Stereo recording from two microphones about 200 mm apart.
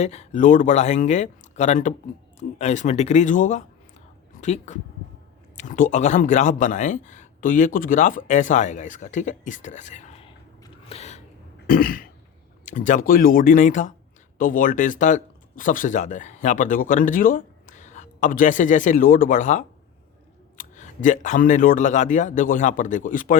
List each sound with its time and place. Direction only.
0.0 s a man's voice: 35° left (ahead or behind)
10.8 s a sound: 35° left (ahead or behind)
11.7 s cough: 45° left (ahead or behind)
12.6 s a man's voice: 40° left (ahead or behind)